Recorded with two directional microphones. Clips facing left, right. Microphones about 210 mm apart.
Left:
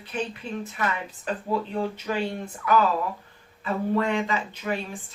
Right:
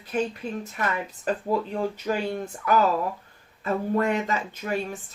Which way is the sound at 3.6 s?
45° right (ahead or behind).